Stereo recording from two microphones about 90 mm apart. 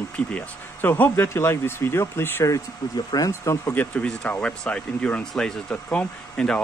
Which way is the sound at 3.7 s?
15° left (ahead or behind).